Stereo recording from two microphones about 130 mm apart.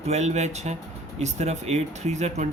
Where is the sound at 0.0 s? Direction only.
60° right (ahead or behind).